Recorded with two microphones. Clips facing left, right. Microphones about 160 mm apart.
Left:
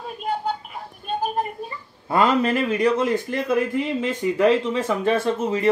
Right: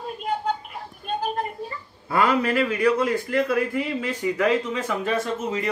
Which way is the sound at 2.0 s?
20° left (ahead or behind).